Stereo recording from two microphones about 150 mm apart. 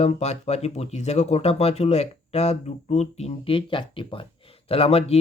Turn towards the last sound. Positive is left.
turn(degrees=40)  # may be behind; listen again after turning